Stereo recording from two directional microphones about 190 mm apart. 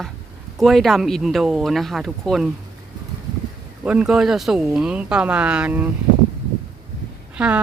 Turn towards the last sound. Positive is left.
turn(degrees=-5)  # may be behind; listen again after turning